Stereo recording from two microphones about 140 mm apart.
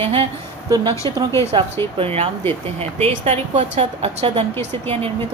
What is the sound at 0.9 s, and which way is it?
A woman's voice, 35° right (ahead or behind).